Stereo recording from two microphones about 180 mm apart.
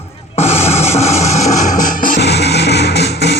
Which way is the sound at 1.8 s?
50° left (ahead or behind).